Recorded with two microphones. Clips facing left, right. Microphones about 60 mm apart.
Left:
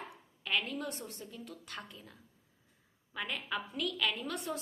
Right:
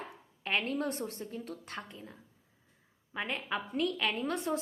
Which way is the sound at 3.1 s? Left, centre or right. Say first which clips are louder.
Right 3 dB; right.